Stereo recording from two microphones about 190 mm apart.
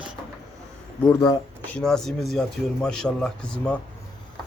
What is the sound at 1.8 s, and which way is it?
Speech, centre (ahead or behind).